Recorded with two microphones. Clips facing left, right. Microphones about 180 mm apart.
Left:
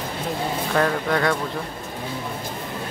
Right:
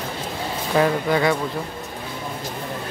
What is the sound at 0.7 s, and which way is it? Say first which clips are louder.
Speech: right 3 dB; 5° right (ahead or behind).